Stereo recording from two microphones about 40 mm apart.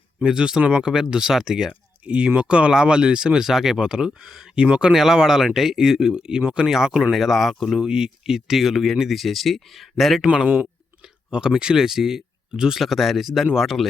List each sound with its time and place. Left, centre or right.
0.2 s speech: centre
2.0 s speech: right
4.9 s speech: centre
7.1 s speech: centre
7.8 s speech: centre
10.4 s speech: right
11.3 s speech: centre